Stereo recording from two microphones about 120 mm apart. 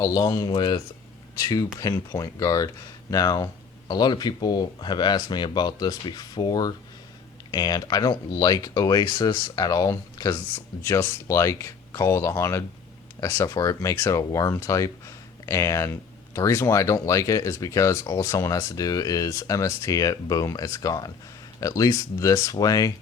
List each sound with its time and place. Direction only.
0.0 s speech: 35° left (ahead or behind)
1.8 s speech: 30° left (ahead or behind)
10.5 s speech: 20° left (ahead or behind)